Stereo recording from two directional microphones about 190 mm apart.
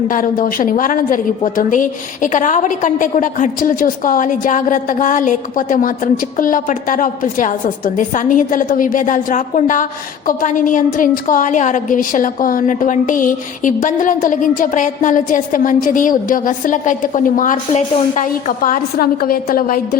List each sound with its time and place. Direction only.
0.1 s a woman's voice: 45° left (ahead or behind)